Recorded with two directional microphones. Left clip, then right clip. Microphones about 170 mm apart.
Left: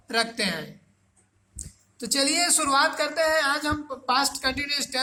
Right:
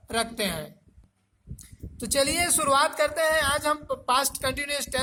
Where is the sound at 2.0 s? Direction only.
35° right (ahead or behind).